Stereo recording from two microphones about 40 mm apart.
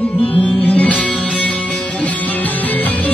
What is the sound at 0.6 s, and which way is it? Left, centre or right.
Music, left.